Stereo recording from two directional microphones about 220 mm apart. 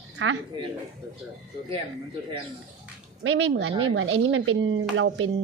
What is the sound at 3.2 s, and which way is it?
Speech, 55° right (ahead or behind).